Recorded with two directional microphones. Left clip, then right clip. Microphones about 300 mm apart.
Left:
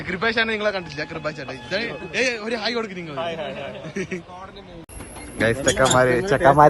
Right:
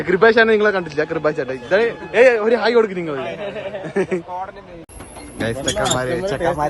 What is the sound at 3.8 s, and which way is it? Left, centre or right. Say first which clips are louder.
Speech: right 12 dB; centre.